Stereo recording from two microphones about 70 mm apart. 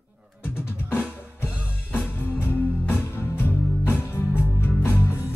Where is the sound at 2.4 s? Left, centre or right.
Left.